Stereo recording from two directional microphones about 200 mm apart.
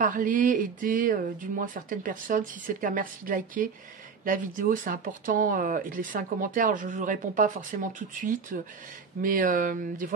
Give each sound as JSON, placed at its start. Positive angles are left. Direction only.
{"t": 0.0, "sound": "speech", "side_deg": -40}